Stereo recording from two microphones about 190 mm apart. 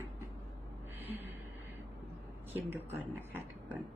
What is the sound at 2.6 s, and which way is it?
Speech, 10° right (ahead or behind).